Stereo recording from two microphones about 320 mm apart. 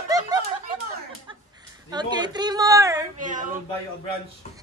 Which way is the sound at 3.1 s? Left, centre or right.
Right.